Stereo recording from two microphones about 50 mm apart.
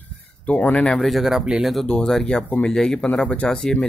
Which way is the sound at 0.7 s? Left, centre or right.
Centre.